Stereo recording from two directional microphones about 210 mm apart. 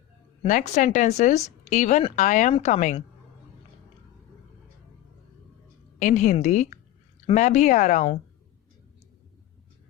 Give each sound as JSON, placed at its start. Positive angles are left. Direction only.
{"t": 0.4, "sound": "speech", "side_deg": 35}
{"t": 6.0, "sound": "speech", "side_deg": 35}